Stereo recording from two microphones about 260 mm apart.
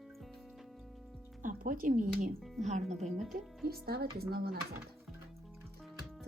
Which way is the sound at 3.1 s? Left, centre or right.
Centre.